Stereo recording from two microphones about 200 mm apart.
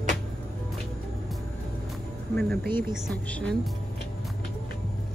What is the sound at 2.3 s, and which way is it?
Music, 5° left (ahead or behind).